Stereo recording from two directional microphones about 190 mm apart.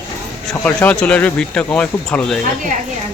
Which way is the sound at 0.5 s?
10° left (ahead or behind).